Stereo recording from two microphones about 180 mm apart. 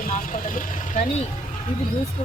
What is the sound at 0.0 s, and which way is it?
Vehicle, 50° left (ahead or behind).